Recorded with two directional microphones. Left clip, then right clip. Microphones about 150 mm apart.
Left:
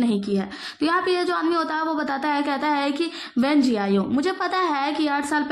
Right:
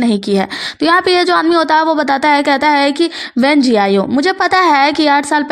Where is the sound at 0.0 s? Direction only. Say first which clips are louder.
Right 10 dB; 65° right (ahead or behind).